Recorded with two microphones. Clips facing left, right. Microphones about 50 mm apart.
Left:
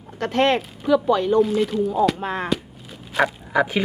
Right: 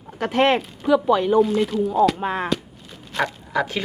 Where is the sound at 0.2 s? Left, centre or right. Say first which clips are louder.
Right 1 dB; centre.